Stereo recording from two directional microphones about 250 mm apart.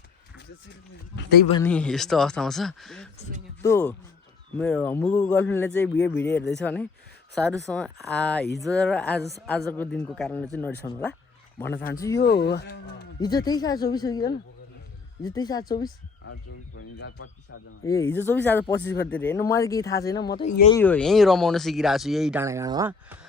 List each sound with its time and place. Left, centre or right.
1.1 s speech: left
1.6 s speech: centre
12.2 s speech: left
13.1 s speech: centre
17.8 s speech: centre